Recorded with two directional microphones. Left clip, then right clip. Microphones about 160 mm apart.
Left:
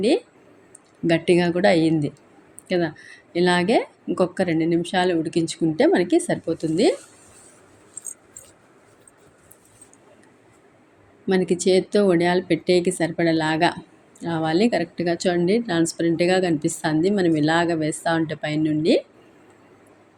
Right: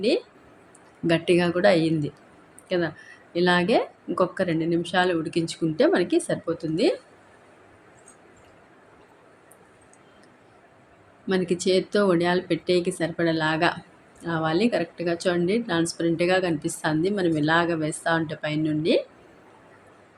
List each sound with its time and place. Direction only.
1.0 s a woman's voice: 15° left (ahead or behind)
11.3 s a woman's voice: 15° left (ahead or behind)